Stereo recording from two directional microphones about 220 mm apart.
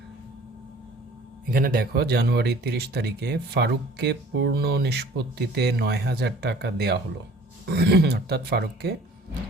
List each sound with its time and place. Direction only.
1.5 s speech: 40° right (ahead or behind)